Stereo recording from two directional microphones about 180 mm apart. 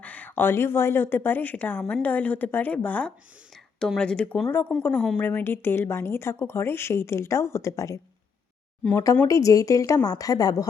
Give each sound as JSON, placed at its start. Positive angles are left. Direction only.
{"t": 0.0, "sound": "a woman's voice", "side_deg": 10}